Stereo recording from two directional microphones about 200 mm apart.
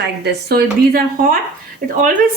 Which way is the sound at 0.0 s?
55° right (ahead or behind).